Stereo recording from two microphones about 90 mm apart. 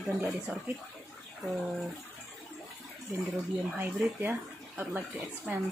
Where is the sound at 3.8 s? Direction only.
25° right (ahead or behind).